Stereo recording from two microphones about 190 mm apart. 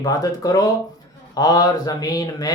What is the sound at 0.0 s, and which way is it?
Speech, 20° left (ahead or behind).